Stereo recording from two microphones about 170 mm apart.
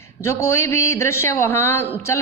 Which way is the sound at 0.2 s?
15° left (ahead or behind).